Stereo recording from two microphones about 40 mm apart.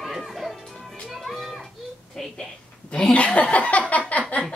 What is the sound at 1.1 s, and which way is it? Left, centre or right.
Music, centre.